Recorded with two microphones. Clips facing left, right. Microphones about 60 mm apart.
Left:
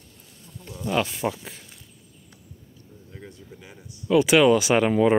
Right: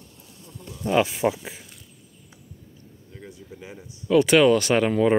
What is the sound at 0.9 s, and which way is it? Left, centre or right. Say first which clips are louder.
Speech: right 4 dB; centre.